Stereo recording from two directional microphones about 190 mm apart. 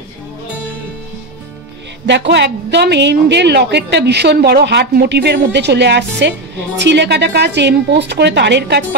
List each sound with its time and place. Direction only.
2.0 s a woman's voice: 65° right (ahead or behind)